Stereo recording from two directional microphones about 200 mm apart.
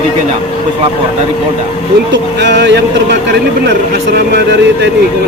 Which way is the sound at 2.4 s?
60° right (ahead or behind).